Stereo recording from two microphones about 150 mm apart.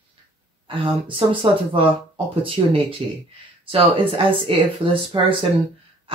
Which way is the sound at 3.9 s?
35° right (ahead or behind).